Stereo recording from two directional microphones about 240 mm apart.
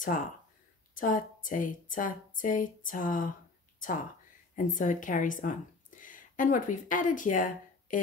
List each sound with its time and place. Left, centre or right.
0.0 s speech: left
4.6 s a woman's voice: left